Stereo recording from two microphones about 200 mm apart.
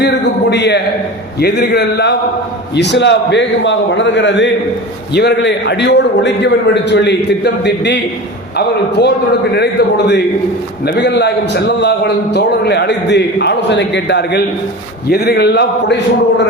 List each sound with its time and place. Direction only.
0.0 s a man's voice: 60° left (ahead or behind)